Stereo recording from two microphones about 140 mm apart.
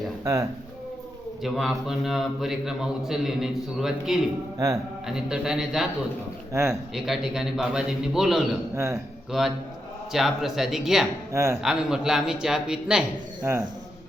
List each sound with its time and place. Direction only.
1.5 s a man's voice: centre (ahead or behind)
4.5 s speech: 25° right (ahead or behind)
5.0 s a man's voice: 5° right (ahead or behind)
8.7 s a man's voice: 20° right (ahead or behind)
9.3 s a man's voice: 5° right (ahead or behind)
11.3 s speech: 20° right (ahead or behind)
11.5 s a man's voice: 5° right (ahead or behind)